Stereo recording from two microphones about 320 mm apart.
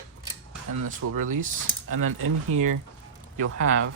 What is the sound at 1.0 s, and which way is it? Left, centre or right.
Speech, right.